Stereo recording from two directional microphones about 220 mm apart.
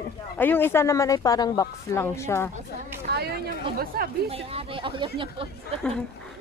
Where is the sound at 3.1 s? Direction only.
45° right (ahead or behind).